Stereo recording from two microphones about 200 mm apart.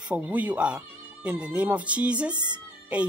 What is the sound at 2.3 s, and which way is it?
Speech, 20° right (ahead or behind).